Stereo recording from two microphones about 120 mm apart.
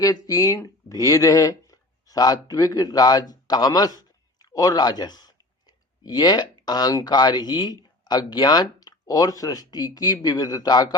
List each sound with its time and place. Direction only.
0.0 s speech: 30° left (ahead or behind)